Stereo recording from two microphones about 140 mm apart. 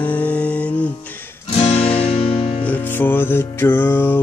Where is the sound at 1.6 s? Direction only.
45° left (ahead or behind).